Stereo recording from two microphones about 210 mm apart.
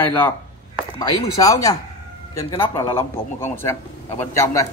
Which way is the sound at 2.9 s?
10° left (ahead or behind).